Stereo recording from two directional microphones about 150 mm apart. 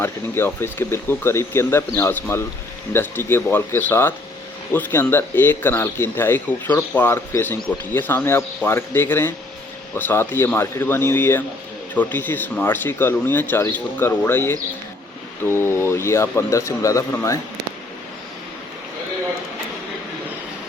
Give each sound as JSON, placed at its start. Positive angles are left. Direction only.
{"t": 0.0, "sound": "speech", "side_deg": 15}